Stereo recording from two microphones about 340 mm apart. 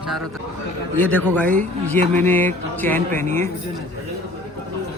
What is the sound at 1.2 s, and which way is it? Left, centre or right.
Speech, centre.